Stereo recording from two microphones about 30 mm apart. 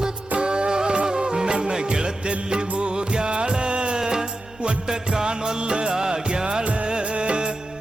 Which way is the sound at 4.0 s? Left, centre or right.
Right.